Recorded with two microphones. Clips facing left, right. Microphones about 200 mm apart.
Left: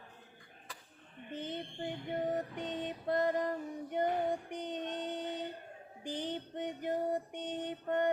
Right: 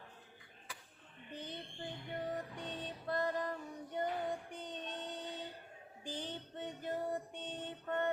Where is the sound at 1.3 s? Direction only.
20° left (ahead or behind).